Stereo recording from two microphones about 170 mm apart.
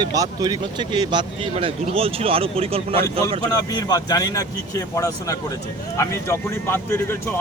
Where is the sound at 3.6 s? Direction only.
20° left (ahead or behind).